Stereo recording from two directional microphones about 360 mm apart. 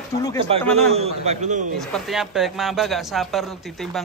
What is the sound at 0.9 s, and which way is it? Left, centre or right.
Speech, centre.